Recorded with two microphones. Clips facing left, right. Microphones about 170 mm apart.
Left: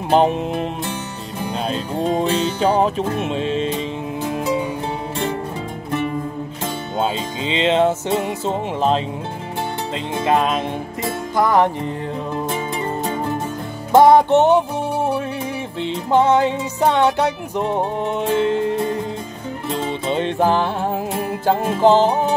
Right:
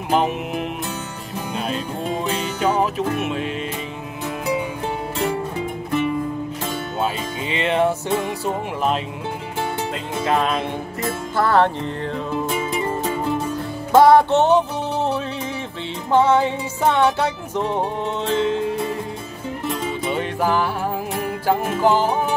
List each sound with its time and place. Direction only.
0.1 s music: 30° left (ahead or behind)
1.7 s music: 30° left (ahead or behind)
7.0 s music: 20° left (ahead or behind)
10.2 s music: 20° left (ahead or behind)
13.9 s music: 15° left (ahead or behind)
15.8 s music: 15° left (ahead or behind)